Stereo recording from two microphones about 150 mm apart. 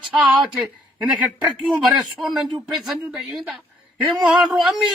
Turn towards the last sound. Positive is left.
turn(degrees=0)  # may be behind; listen again after turning